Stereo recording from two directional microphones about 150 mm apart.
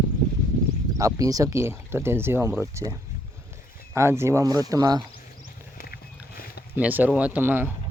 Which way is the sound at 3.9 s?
15° right (ahead or behind).